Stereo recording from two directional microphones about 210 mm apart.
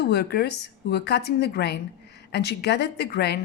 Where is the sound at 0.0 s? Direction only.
50° left (ahead or behind).